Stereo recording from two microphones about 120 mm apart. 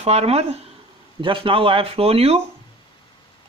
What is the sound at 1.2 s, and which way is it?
Speech, 45° right (ahead or behind).